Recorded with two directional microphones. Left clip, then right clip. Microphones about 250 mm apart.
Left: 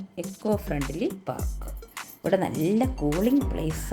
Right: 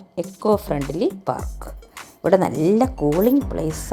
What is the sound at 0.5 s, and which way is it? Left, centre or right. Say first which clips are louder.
Speech: right 7 dB; right.